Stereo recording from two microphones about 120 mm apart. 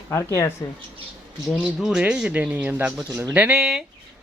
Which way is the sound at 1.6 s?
5° right (ahead or behind).